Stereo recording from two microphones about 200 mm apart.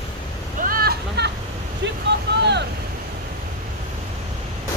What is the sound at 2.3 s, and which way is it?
Speech, 55° right (ahead or behind).